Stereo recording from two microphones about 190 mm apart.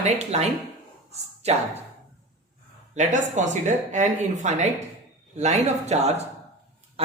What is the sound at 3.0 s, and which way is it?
Speech, 40° right (ahead or behind).